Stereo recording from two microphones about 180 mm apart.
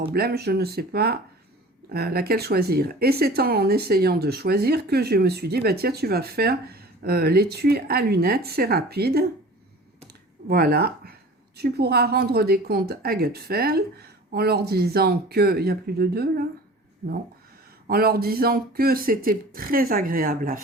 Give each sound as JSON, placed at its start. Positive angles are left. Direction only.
{"t": 0.1, "sound": "speech", "side_deg": -60}
{"t": 10.5, "sound": "speech", "side_deg": -60}
{"t": 17.8, "sound": "speech", "side_deg": -55}